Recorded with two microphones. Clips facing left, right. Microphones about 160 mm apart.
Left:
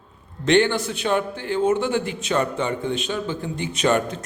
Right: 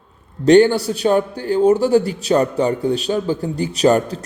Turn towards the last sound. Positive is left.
turn(degrees=-35)  # may be behind; listen again after turning